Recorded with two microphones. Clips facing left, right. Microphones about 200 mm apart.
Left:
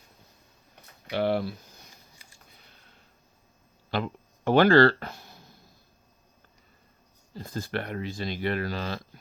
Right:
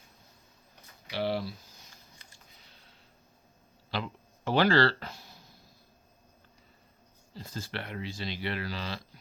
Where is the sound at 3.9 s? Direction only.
50° left (ahead or behind).